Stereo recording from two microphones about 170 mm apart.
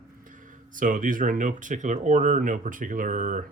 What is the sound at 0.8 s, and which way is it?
Speech, 50° right (ahead or behind).